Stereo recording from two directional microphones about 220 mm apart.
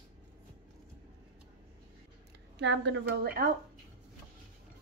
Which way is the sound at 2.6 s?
50° right (ahead or behind).